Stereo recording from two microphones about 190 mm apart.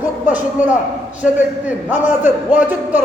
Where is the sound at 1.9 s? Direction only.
10° right (ahead or behind).